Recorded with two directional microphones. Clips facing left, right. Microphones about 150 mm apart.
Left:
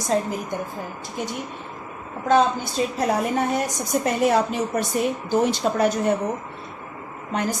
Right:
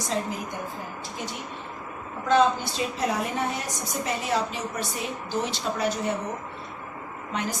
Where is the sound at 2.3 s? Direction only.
45° left (ahead or behind).